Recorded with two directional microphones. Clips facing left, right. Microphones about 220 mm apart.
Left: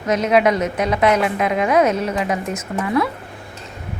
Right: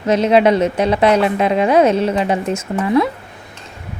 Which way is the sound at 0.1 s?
30° right (ahead or behind).